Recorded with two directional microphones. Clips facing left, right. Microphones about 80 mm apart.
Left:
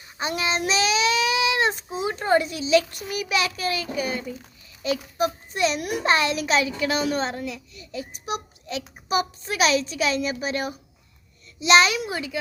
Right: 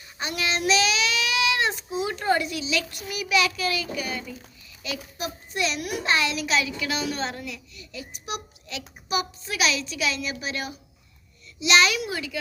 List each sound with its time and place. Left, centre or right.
0.2 s child singing: left
4.8 s a child's voice: left